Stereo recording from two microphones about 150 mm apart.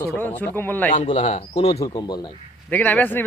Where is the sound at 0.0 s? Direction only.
15° left (ahead or behind).